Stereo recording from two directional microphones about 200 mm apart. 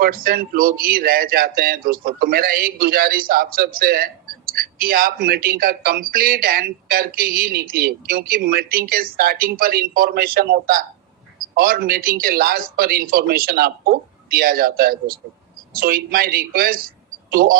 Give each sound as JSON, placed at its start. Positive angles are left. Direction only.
{"t": 0.0, "sound": "speech", "side_deg": -45}